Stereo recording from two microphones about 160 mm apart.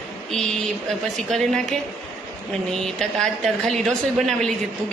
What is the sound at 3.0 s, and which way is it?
A woman's voice, centre (ahead or behind).